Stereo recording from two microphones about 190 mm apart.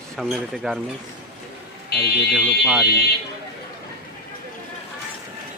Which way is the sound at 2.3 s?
Centre (ahead or behind).